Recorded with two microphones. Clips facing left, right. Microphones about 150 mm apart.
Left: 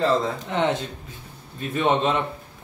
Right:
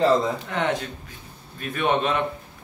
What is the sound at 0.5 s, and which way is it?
Speech, 25° left (ahead or behind).